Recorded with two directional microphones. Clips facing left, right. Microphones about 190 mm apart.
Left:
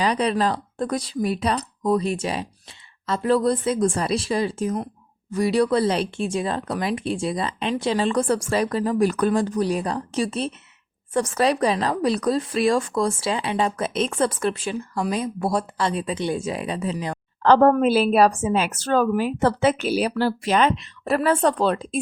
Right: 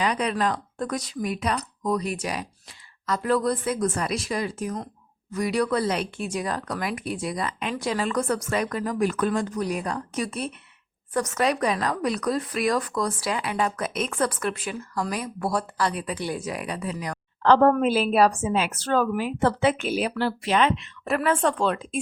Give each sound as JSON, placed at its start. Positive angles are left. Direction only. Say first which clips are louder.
{"t": 0.0, "sound": "speech", "louder": "left 3 dB", "side_deg": 30}
{"t": 17.4, "sound": "a woman's voice", "louder": "left 2 dB", "side_deg": 40}